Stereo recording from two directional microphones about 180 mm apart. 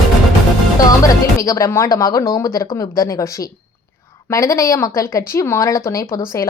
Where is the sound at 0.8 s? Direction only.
20° left (ahead or behind).